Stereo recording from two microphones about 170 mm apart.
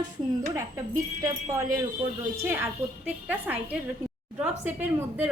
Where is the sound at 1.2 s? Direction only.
20° right (ahead or behind).